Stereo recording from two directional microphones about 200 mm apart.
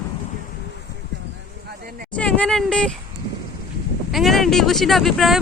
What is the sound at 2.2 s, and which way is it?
Speech, 5° left (ahead or behind).